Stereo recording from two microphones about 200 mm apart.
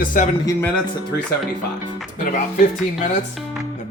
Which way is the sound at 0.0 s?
40° left (ahead or behind).